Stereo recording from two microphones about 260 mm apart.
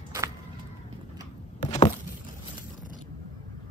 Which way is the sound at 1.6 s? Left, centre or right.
Centre.